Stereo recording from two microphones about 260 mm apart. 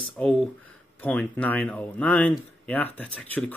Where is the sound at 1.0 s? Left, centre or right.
Centre.